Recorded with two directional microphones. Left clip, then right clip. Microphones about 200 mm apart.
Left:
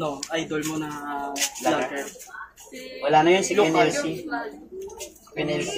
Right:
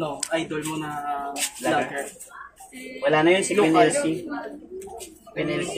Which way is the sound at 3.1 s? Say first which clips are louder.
Left 2 dB; 10° right (ahead or behind).